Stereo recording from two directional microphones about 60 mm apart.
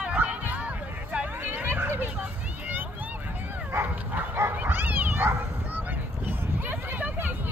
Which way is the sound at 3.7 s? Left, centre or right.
Right.